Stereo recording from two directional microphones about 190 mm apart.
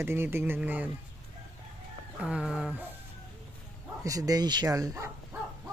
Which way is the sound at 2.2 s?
5° right (ahead or behind).